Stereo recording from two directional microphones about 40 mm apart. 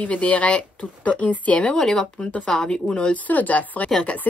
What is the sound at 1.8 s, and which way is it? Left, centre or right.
A woman's voice, centre.